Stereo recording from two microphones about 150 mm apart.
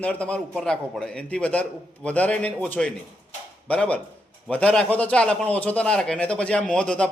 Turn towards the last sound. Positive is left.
turn(degrees=5)  # may be behind; listen again after turning